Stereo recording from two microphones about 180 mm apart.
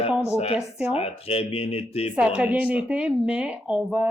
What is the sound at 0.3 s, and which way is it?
Speech, 35° left (ahead or behind).